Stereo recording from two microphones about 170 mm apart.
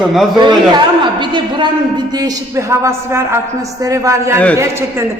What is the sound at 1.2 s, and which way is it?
A man's voice, 30° right (ahead or behind).